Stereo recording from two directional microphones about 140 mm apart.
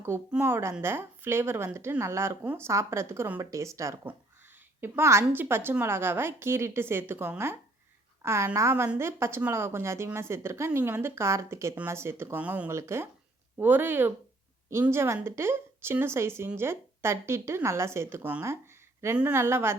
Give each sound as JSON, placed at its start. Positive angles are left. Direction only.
{"t": 0.3, "sound": "a woman's voice", "side_deg": -15}